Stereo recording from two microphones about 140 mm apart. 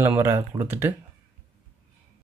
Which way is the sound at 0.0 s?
15° right (ahead or behind).